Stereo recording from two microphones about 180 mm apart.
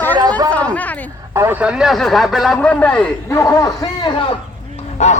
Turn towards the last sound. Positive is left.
turn(degrees=40)  # may be behind; listen again after turning